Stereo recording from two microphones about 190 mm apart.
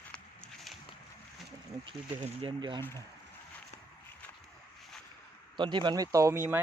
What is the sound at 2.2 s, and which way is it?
Speech, 35° right (ahead or behind).